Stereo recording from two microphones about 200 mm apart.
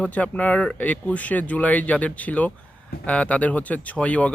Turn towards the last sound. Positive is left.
turn(degrees=5)  # may be behind; listen again after turning